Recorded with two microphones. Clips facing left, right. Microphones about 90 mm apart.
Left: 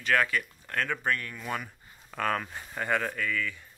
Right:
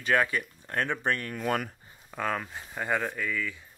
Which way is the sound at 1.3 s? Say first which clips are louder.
Right 6 dB; 55° right (ahead or behind).